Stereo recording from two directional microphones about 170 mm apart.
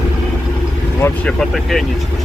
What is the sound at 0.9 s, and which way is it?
Speech, 15° left (ahead or behind).